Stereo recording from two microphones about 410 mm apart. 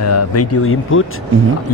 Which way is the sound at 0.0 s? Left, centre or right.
Left.